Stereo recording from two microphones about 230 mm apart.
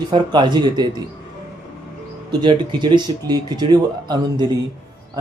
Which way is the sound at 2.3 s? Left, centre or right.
Centre.